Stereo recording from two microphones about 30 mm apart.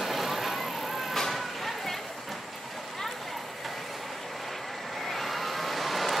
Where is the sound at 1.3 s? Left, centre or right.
Centre.